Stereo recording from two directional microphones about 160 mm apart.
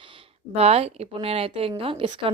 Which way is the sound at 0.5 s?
40° right (ahead or behind).